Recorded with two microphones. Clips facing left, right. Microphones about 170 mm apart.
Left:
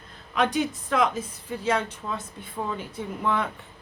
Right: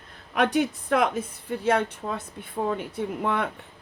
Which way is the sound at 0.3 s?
60° right (ahead or behind).